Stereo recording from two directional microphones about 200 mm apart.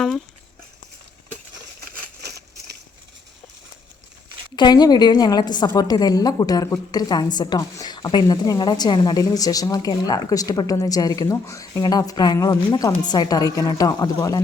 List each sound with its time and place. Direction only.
4.5 s a woman's voice: 20° left (ahead or behind)